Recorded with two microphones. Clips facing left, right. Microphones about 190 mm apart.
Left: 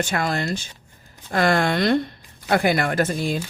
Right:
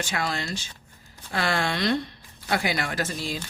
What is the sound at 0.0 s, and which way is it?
Speech, 50° left (ahead or behind).